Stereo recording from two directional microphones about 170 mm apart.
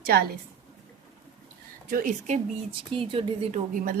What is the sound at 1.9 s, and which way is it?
Speech, 50° right (ahead or behind).